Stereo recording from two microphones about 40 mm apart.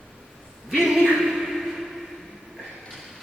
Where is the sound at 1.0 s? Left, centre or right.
Centre.